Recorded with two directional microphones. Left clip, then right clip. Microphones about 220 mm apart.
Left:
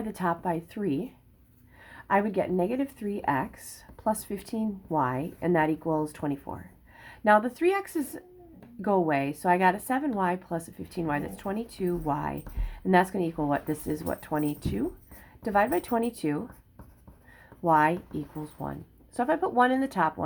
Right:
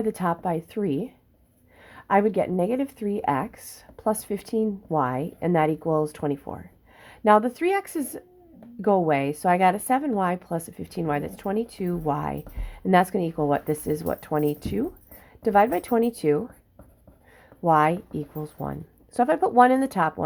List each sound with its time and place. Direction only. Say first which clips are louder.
0.0 s speech: right 4 dB; 30° right (ahead or behind)
17.6 s speech: right 3 dB; 30° right (ahead or behind)